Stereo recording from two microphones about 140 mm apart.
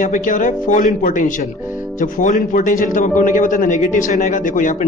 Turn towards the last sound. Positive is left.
turn(degrees=65)  # may be behind; listen again after turning